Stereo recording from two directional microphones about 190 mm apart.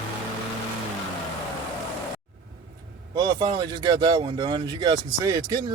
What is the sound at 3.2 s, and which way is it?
Speech, 20° right (ahead or behind).